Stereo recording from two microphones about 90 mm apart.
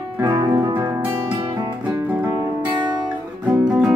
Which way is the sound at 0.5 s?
50° right (ahead or behind).